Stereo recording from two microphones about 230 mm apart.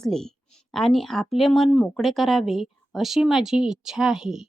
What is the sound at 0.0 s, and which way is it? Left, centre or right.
Speech, centre.